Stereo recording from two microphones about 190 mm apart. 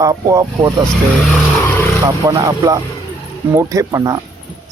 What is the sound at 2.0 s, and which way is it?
Speech, 15° right (ahead or behind).